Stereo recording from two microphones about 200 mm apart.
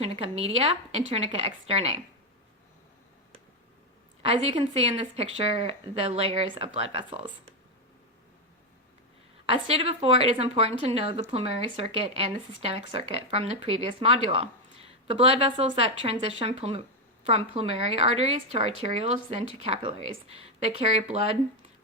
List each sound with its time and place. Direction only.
0.0 s a woman's voice: 30° right (ahead or behind)
4.4 s speech: 30° right (ahead or behind)
9.5 s a woman's voice: 30° right (ahead or behind)